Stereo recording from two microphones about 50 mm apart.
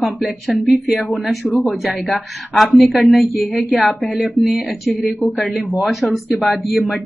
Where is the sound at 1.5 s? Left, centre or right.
Left.